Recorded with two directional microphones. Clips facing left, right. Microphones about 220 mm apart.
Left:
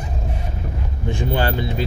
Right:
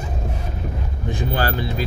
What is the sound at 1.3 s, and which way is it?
Speech, 25° left (ahead or behind).